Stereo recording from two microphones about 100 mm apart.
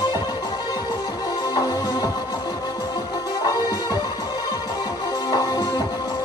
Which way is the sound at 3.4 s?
40° left (ahead or behind).